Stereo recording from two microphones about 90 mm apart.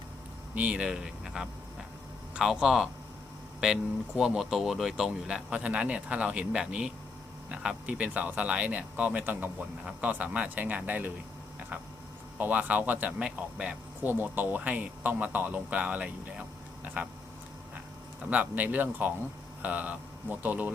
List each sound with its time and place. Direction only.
0.5 s speech: 15° right (ahead or behind)
12.4 s speech: 20° right (ahead or behind)
18.3 s speech: 20° right (ahead or behind)